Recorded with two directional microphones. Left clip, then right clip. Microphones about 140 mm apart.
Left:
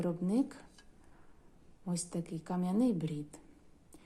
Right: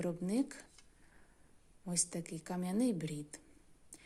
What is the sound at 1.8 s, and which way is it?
A woman's voice, 20° right (ahead or behind).